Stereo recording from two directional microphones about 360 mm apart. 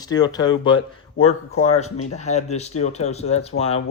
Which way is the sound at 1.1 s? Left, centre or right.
Left.